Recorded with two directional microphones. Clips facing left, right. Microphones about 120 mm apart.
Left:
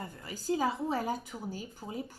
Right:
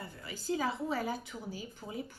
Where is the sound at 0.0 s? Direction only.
40° left (ahead or behind).